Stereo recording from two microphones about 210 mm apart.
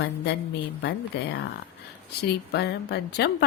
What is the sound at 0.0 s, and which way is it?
Speech, 55° left (ahead or behind).